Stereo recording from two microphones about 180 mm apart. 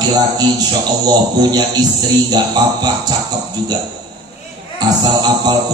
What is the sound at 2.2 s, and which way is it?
Speech, 25° right (ahead or behind).